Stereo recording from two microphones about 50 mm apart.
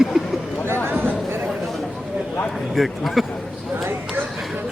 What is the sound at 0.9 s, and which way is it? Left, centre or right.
Chatter, right.